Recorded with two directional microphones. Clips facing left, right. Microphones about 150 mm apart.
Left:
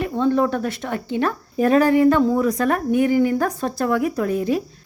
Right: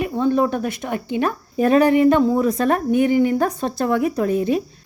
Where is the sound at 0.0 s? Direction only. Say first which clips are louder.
Even; 15° right (ahead or behind).